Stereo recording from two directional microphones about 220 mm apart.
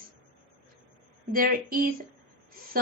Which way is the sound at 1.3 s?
40° right (ahead or behind).